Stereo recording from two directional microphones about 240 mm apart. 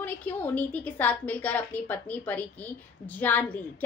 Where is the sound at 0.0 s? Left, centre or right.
Centre.